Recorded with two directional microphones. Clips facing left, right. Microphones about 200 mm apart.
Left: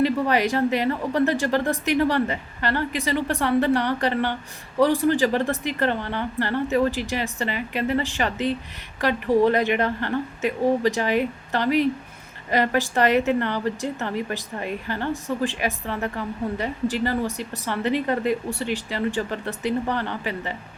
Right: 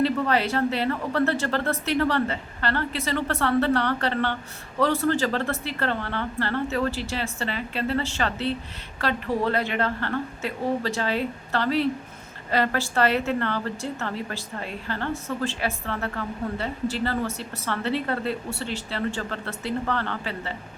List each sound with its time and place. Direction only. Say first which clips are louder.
0.0 s a woman's voice: left 2 dB; 15° left (ahead or behind)